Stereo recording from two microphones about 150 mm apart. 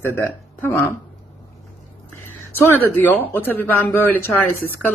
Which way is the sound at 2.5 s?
15° left (ahead or behind).